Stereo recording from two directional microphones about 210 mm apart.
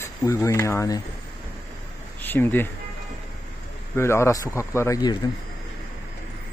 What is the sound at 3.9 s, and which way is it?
Speech, 10° left (ahead or behind).